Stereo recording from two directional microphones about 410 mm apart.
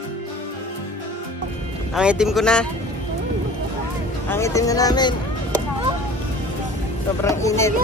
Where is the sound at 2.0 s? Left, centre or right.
Centre.